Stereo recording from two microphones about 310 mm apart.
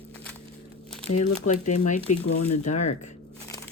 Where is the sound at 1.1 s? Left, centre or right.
Left.